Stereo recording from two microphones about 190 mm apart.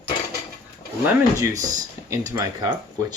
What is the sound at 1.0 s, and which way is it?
Speech, 15° right (ahead or behind).